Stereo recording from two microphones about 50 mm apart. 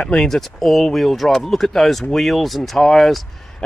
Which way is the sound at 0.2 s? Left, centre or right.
Centre.